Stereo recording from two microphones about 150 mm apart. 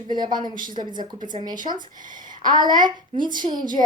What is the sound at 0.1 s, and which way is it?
Speech, 30° right (ahead or behind).